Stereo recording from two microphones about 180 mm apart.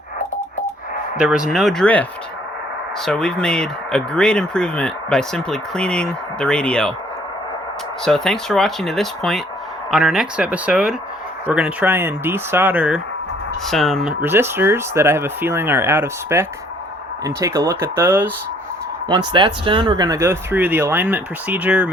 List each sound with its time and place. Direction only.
1.2 s speech: 5° right (ahead or behind)
8.0 s speech: 5° left (ahead or behind); by 18.3 s 15° right (ahead or behind)
19.3 s speech: 25° right (ahead or behind); by 21.8 s 10° right (ahead or behind)